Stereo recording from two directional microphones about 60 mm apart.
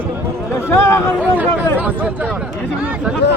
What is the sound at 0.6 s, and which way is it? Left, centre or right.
Speech, left.